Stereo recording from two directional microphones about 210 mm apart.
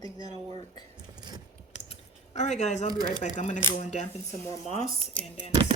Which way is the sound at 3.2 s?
35° left (ahead or behind).